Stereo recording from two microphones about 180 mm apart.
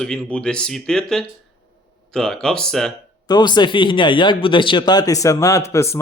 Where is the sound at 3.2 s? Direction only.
25° left (ahead or behind).